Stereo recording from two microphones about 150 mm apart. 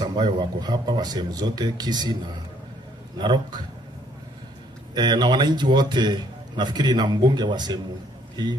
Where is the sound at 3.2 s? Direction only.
30° right (ahead or behind).